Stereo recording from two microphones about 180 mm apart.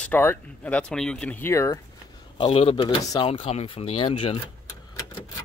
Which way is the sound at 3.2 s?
30° left (ahead or behind).